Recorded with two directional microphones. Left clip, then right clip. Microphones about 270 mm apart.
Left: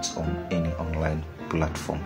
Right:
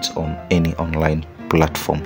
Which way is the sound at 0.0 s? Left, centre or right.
Right.